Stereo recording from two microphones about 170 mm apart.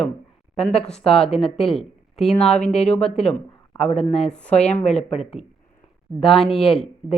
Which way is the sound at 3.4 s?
40° left (ahead or behind).